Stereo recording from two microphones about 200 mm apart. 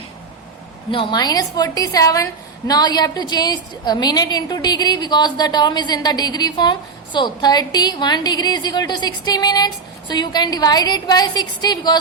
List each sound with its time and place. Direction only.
0.9 s a woman's voice: 25° left (ahead or behind)